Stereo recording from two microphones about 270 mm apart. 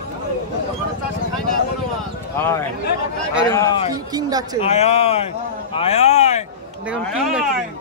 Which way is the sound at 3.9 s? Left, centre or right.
Centre.